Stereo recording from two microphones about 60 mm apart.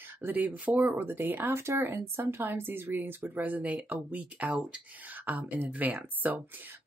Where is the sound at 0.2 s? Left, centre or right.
Right.